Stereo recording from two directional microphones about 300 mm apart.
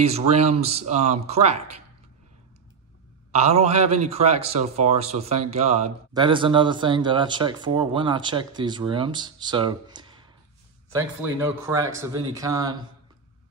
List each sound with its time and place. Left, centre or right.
0.0 s speech: right
3.3 s a man's voice: right